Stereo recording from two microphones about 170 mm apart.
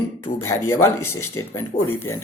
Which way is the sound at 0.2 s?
15° left (ahead or behind).